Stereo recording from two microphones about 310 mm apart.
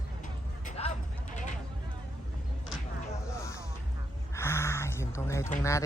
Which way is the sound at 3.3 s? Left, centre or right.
Centre.